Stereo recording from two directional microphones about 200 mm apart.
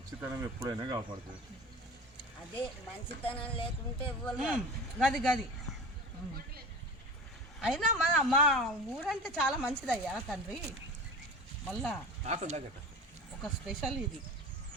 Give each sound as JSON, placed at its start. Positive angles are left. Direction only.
{"t": 0.2, "sound": "speech", "side_deg": -10}
{"t": 3.2, "sound": "speech", "side_deg": 25}
{"t": 4.3, "sound": "speech", "side_deg": -5}
{"t": 7.6, "sound": "speech", "side_deg": 0}
{"t": 11.7, "sound": "speech", "side_deg": 0}
{"t": 12.2, "sound": "speech", "side_deg": -35}
{"t": 13.4, "sound": "speech", "side_deg": -5}